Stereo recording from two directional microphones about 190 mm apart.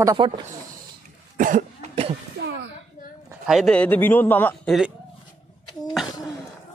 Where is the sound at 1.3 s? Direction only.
40° right (ahead or behind).